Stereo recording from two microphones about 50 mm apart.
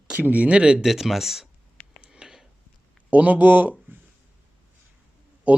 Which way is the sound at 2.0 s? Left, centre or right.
Centre.